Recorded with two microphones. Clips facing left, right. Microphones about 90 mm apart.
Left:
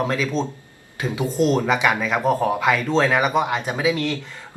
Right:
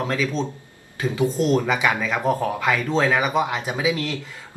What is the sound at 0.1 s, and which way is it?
Speech, 5° left (ahead or behind).